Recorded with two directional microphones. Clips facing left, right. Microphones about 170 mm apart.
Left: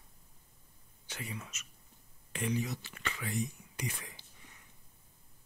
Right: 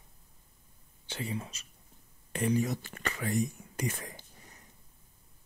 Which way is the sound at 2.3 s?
40° right (ahead or behind).